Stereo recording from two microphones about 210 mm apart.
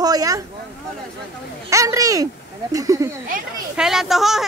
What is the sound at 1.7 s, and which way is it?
Speech, 15° right (ahead or behind).